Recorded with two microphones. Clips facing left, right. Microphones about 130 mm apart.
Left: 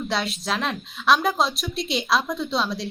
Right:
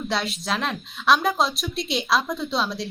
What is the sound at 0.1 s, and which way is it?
A woman's voice, centre (ahead or behind).